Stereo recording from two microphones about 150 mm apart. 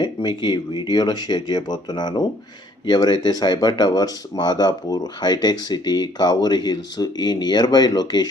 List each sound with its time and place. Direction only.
0.0 s speech: 30° left (ahead or behind)